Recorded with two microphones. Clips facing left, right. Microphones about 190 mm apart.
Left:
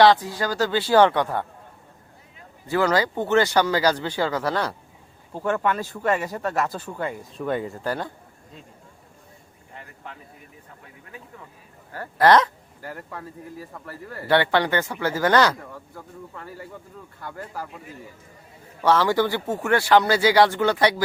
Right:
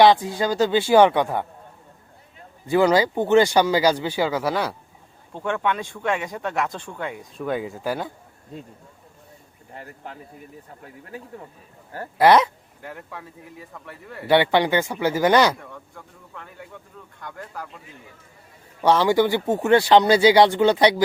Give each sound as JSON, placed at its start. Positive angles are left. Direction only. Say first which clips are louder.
{"t": 0.0, "sound": "speech", "louder": "right 1 dB", "side_deg": -20}
{"t": 2.6, "sound": "speech", "louder": "right 4 dB", "side_deg": -15}
{"t": 5.3, "sound": "speech", "louder": "left 1 dB", "side_deg": 5}
{"t": 9.7, "sound": "speech", "louder": "right 3 dB", "side_deg": -40}
{"t": 11.9, "sound": "speech", "louder": "right 1 dB", "side_deg": -10}
{"t": 12.8, "sound": "speech", "louder": "left 1 dB", "side_deg": 0}
{"t": 14.3, "sound": "speech", "louder": "right 2 dB", "side_deg": -15}
{"t": 15.5, "sound": "speech", "louder": "left 2 dB", "side_deg": 5}
{"t": 18.8, "sound": "speech", "louder": "right 2 dB", "side_deg": -15}